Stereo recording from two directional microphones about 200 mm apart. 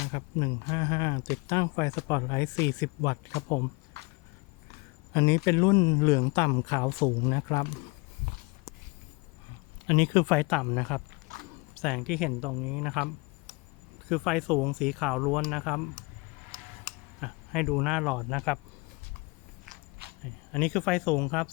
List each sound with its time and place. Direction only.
0.1 s a man's voice: 20° left (ahead or behind)
3.9 s a sound: 55° right (ahead or behind)
5.1 s a man's voice: 15° left (ahead or behind)
9.8 s speech: 25° left (ahead or behind)
10.2 s speech: 5° left (ahead or behind)
14.1 s speech: centre (ahead or behind)
17.2 s speech: 5° right (ahead or behind)
20.0 s a sound: 50° right (ahead or behind)
20.5 s speech: 5° left (ahead or behind)